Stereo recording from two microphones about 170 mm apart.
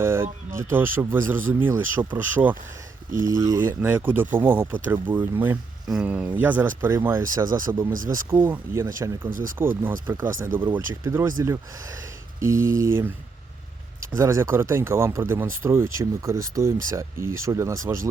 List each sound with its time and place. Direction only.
0.0 s speech: 15° right (ahead or behind)
3.2 s speech: 20° right (ahead or behind)
3.8 s speech: 10° right (ahead or behind)
14.2 s speech: 15° right (ahead or behind)